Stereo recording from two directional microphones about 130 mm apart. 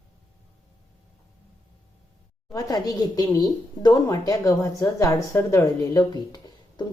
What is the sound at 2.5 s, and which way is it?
A woman's voice, 30° left (ahead or behind).